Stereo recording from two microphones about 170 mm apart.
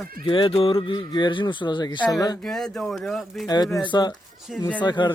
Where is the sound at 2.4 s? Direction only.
5° left (ahead or behind).